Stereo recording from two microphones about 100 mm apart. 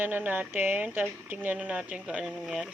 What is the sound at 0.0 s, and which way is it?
Speech, 15° right (ahead or behind).